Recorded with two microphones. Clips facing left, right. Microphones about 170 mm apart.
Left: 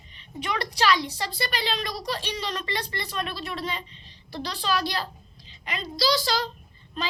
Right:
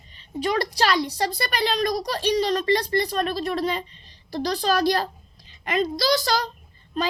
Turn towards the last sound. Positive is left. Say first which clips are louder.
# right 6 dB
turn(degrees=-40)  # may be behind; listen again after turning